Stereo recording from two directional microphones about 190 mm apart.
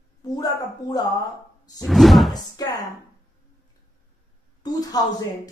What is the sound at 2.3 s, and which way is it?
Speech, 20° left (ahead or behind).